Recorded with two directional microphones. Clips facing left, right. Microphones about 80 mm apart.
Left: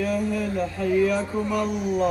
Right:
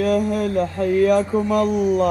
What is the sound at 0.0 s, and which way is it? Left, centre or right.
Speech, right.